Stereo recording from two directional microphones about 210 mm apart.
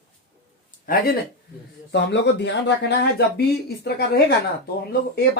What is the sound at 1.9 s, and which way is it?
Speech, 55° left (ahead or behind).